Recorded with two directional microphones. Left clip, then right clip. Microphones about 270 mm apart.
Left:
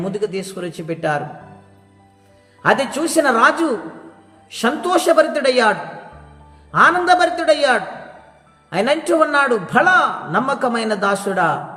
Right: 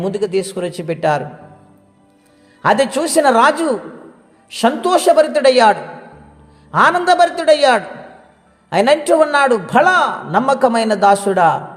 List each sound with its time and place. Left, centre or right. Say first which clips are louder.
0.1 s a man's voice: right 5 dB; right
2.6 s a man's voice: right 3 dB; right